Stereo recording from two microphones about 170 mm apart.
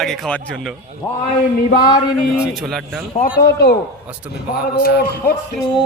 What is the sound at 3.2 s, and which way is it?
Speech, 60° left (ahead or behind).